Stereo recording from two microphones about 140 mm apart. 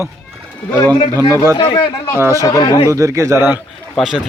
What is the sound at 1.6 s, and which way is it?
Speech, 40° left (ahead or behind).